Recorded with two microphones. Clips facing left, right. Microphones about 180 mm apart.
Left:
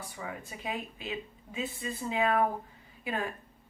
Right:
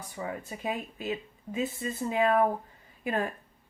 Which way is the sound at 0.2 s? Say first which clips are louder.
Right 6 dB; 40° right (ahead or behind).